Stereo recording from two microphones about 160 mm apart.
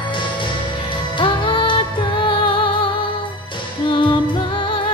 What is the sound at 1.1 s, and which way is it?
Music, 30° left (ahead or behind).